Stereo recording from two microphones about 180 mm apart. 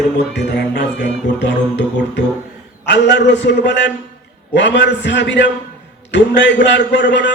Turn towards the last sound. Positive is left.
turn(degrees=75)  # may be behind; listen again after turning